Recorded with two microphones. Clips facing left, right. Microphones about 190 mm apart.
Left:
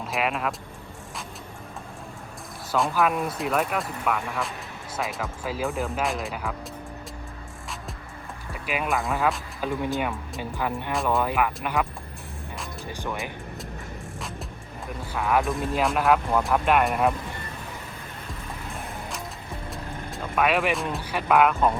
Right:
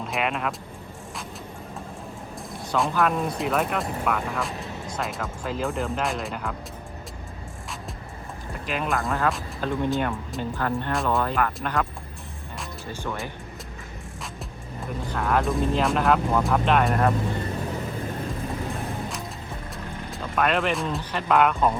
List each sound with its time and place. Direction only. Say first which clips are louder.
0.0 s speech: even; centre (ahead or behind)
2.7 s speech: even; centre (ahead or behind)
8.5 s speech: even; 10° left (ahead or behind)
10.5 s speech: right 1 dB; 15° left (ahead or behind)
12.9 s speech: right 1 dB; 15° left (ahead or behind)
15.1 s speech: even; 5° left (ahead or behind)
19.7 s music: even; centre (ahead or behind)
20.9 s speech: left 1 dB; 10° left (ahead or behind)